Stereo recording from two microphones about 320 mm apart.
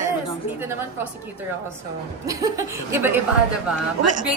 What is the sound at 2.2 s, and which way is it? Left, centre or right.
Speech, centre.